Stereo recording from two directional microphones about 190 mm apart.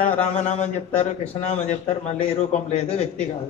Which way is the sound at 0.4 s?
35° left (ahead or behind).